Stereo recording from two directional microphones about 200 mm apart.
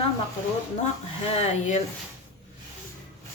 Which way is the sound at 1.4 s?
35° left (ahead or behind).